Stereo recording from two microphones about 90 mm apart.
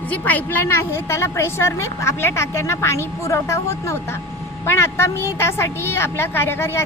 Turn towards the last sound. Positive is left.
turn(degrees=25)  # may be behind; listen again after turning